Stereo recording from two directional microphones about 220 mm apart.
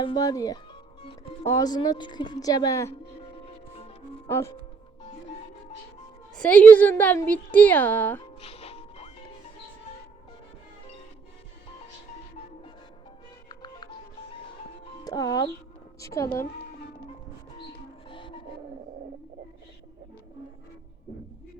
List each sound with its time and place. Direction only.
0.0 s a woman's voice: 20° left (ahead or behind)
3.2 s music: 25° left (ahead or behind)
4.3 s a woman's voice: 10° left (ahead or behind)
6.3 s a woman's voice: 5° left (ahead or behind)
8.4 s music: 25° left (ahead or behind)
13.5 s music: 20° left (ahead or behind)
15.0 s a woman's voice: 15° left (ahead or behind)
18.1 s music: 20° left (ahead or behind)